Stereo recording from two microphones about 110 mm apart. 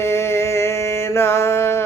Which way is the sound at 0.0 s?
25° left (ahead or behind).